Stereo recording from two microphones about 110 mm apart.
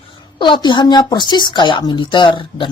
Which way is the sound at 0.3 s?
45° left (ahead or behind).